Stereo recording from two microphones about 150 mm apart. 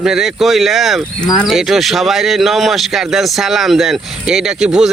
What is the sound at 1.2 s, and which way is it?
Speech, 25° left (ahead or behind).